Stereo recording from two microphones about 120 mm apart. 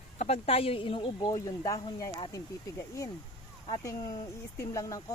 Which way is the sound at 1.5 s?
30° left (ahead or behind).